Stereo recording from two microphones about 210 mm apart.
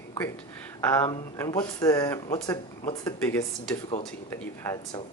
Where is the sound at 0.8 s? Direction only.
15° left (ahead or behind).